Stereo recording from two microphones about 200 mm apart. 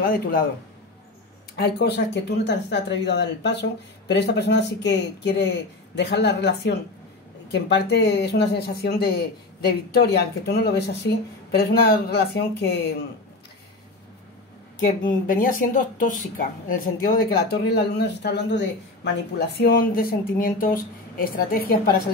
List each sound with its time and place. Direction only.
0.0 s speech: 50° left (ahead or behind)
1.6 s speech: 55° left (ahead or behind)
14.8 s speech: 45° left (ahead or behind)